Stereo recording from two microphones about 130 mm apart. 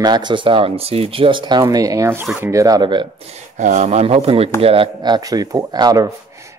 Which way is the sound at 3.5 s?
65° right (ahead or behind).